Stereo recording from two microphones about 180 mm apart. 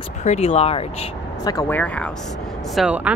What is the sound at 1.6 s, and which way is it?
Speech, 10° left (ahead or behind).